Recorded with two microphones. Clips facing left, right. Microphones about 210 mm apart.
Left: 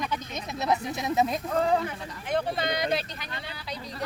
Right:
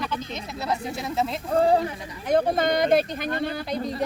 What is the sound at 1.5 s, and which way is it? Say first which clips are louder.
Speech: right 5 dB; 30° right (ahead or behind).